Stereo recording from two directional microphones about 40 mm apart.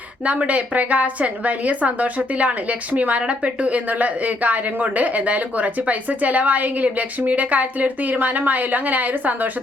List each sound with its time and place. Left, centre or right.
0.3 s a woman's voice: right